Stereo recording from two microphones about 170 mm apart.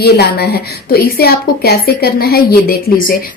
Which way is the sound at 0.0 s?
70° left (ahead or behind).